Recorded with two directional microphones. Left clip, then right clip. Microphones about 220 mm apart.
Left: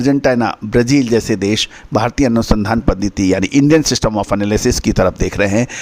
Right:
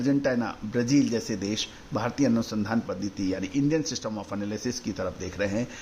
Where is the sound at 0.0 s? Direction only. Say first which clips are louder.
Left 13 dB; 45° left (ahead or behind).